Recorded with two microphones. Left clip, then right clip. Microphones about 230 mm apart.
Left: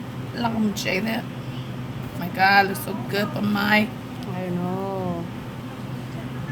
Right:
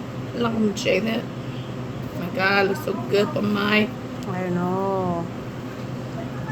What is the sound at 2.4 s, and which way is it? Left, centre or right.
A woman's voice, left.